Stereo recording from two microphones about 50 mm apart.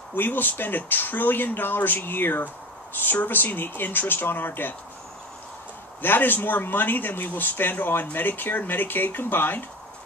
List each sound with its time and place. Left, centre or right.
0.1 s speech: left
6.0 s speech: left